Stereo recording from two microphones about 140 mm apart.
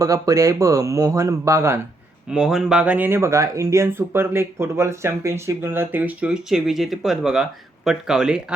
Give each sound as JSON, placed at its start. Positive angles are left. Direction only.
{"t": 0.0, "sound": "speech", "side_deg": -20}
{"t": 2.3, "sound": "speech", "side_deg": 0}